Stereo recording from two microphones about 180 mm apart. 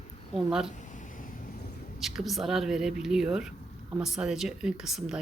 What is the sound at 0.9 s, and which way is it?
Wind noise, 50° left (ahead or behind).